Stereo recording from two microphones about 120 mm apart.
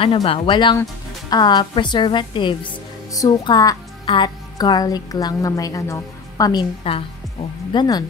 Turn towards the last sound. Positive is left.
turn(degrees=40)  # may be behind; listen again after turning